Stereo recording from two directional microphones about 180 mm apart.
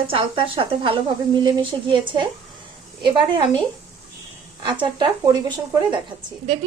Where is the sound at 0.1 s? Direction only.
30° right (ahead or behind).